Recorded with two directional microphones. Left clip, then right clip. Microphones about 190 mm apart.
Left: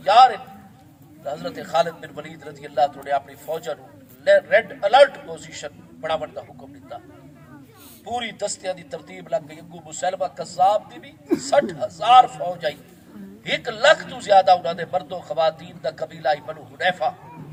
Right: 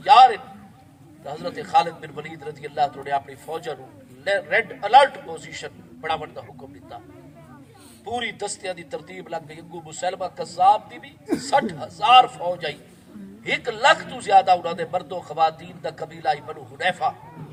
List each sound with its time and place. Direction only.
0.0 s a sound: 25° left (ahead or behind)
1.2 s a man's voice: 25° left (ahead or behind)
8.0 s a man's voice: 25° left (ahead or behind)